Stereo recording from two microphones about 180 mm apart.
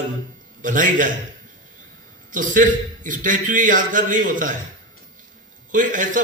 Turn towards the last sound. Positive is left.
turn(degrees=-45)  # may be behind; listen again after turning